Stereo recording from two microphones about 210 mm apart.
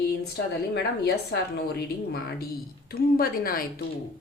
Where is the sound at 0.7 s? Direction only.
55° left (ahead or behind).